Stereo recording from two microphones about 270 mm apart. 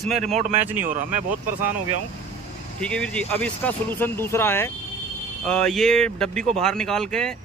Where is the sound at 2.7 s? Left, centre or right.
Centre.